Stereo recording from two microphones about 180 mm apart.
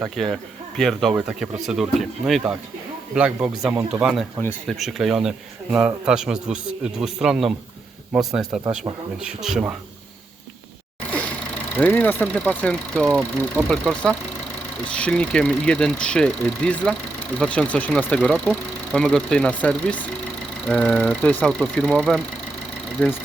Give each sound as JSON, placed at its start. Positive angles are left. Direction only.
{"t": 0.0, "sound": "speech", "side_deg": 0}
{"t": 11.8, "sound": "speech", "side_deg": 10}